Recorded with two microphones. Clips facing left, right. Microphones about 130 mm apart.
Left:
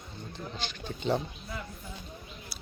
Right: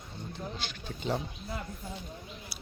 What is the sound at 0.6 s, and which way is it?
Speech, 5° right (ahead or behind).